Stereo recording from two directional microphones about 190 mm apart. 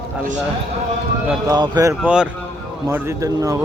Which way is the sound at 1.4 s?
20° right (ahead or behind).